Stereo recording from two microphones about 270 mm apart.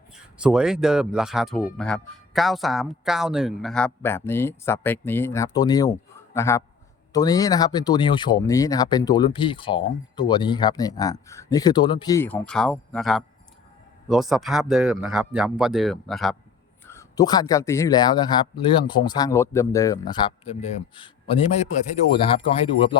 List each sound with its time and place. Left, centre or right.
0.1 s speech: centre